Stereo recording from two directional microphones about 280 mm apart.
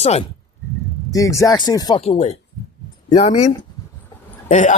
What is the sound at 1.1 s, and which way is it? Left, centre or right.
Speech, centre.